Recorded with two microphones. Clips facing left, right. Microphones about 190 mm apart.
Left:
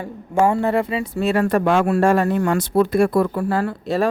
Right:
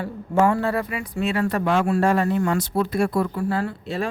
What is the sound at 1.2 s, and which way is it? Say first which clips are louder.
Speech: left 4 dB; 45° left (ahead or behind).